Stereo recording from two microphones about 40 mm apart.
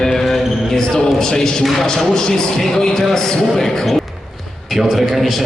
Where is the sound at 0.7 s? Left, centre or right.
Centre.